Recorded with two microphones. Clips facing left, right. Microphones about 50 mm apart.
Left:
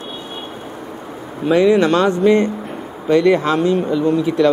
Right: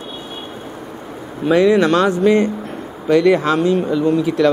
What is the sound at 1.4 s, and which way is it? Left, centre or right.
Speech, centre.